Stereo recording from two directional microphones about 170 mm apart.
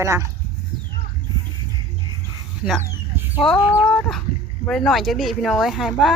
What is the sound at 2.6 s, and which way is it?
Speech, 5° right (ahead or behind).